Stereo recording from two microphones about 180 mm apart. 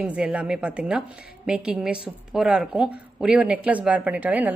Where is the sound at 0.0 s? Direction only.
5° right (ahead or behind).